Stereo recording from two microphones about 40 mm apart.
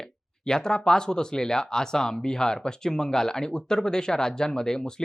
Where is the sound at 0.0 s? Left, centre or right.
Centre.